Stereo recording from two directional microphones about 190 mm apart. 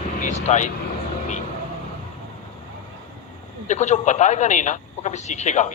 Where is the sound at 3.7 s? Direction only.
40° left (ahead or behind).